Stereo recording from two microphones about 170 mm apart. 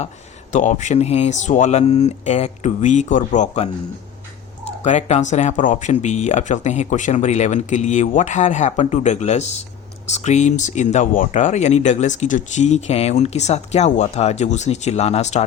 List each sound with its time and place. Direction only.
0.5 s speech: 45° left (ahead or behind)